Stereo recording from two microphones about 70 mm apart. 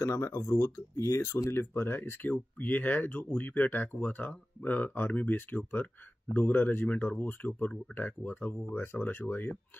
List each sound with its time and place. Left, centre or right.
0.0 s speech: left